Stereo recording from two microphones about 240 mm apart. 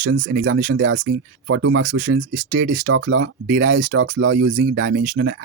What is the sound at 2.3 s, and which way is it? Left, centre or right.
Speech, right.